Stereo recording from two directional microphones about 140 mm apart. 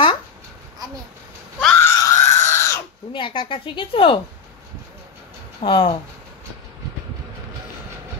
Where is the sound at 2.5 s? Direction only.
20° left (ahead or behind).